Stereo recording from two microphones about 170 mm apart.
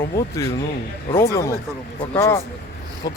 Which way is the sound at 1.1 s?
15° left (ahead or behind).